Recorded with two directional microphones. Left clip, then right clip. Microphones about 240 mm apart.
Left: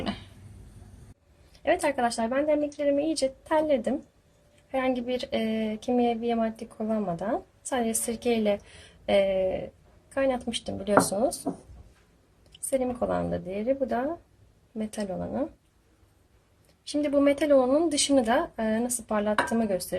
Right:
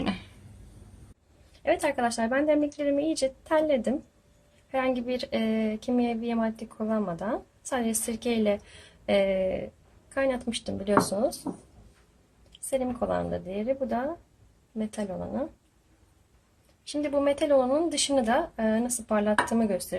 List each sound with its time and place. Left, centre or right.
0.0 s a sound: right
1.5 s speech: centre
12.7 s speech: centre
17.0 s speech: centre